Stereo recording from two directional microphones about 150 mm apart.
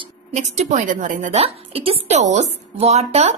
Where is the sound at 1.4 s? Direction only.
40° right (ahead or behind).